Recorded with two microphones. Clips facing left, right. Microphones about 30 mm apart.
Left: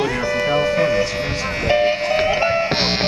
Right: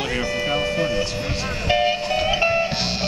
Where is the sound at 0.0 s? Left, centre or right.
Centre.